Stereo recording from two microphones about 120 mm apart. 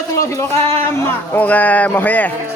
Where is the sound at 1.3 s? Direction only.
15° left (ahead or behind).